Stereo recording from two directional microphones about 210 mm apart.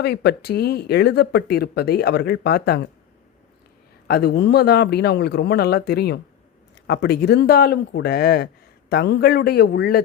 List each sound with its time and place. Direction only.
0.0 s speech: 50° left (ahead or behind)
4.1 s speech: 50° left (ahead or behind)